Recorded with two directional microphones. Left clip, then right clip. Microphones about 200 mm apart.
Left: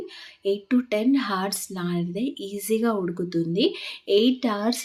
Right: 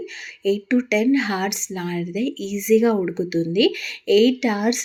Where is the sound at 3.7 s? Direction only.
45° left (ahead or behind).